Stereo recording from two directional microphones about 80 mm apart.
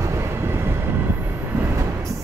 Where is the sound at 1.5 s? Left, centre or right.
Right.